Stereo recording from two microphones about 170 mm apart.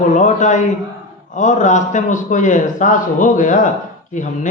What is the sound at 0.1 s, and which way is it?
A man's voice, 45° left (ahead or behind).